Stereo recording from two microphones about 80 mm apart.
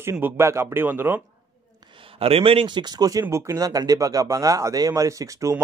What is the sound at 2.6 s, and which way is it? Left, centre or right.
Speech, right.